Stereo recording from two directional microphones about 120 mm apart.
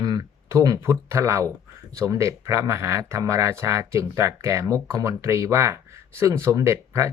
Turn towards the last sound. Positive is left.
turn(degrees=-25)  # may be behind; listen again after turning